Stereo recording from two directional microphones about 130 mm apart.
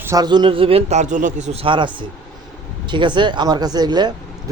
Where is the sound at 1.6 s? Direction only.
40° right (ahead or behind).